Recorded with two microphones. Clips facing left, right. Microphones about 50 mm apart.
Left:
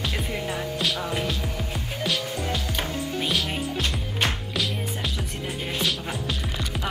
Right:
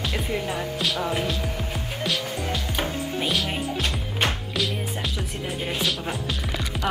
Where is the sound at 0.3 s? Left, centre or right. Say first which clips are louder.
Right 2 dB; centre.